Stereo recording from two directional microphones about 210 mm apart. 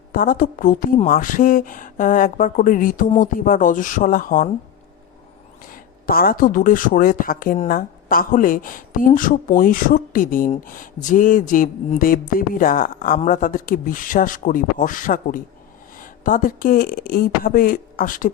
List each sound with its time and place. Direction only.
0.1 s speech: 40° left (ahead or behind)
5.6 s speech: 45° left (ahead or behind)